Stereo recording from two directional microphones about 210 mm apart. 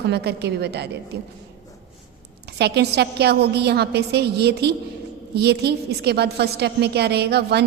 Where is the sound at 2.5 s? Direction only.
50° right (ahead or behind).